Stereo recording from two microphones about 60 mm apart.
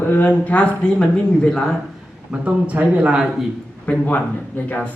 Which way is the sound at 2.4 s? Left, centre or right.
Right.